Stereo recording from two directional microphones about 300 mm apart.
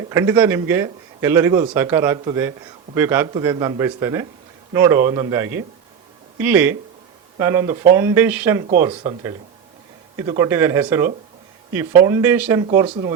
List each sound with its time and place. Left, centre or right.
0.1 s speech: centre